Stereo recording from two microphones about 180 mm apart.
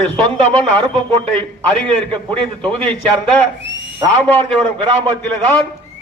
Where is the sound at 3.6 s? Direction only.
85° right.